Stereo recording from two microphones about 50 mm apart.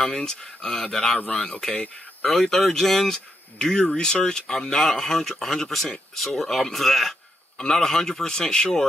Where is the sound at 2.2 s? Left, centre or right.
Centre.